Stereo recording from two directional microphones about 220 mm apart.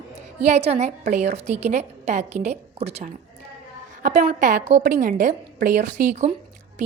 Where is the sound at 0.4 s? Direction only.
30° right (ahead or behind).